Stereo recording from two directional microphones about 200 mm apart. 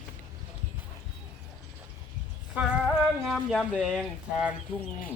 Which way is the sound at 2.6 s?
5° right (ahead or behind).